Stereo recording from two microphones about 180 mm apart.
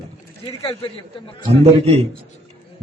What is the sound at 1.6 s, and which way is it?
Speech, 35° right (ahead or behind).